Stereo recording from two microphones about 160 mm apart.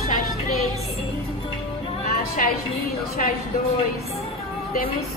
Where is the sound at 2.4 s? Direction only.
55° left (ahead or behind).